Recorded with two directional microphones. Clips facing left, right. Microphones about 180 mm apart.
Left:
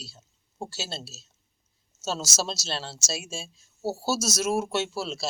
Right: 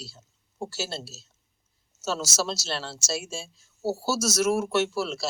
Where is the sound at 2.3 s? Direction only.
20° left (ahead or behind).